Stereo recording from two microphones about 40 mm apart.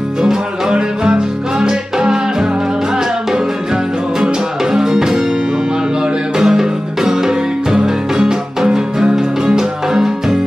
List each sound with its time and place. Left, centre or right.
0.2 s music: centre
4.7 s music: centre
6.3 s music: centre